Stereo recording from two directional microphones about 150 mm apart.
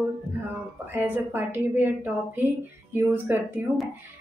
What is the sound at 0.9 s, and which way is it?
A woman's voice, 10° right (ahead or behind).